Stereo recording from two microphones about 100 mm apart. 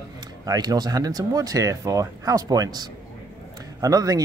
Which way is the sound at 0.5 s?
40° right (ahead or behind).